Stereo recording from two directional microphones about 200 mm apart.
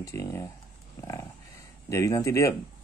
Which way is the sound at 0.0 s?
15° left (ahead or behind).